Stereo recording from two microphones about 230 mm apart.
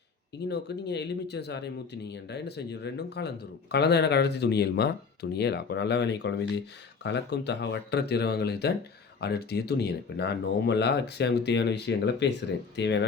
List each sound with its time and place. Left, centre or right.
0.4 s speech: left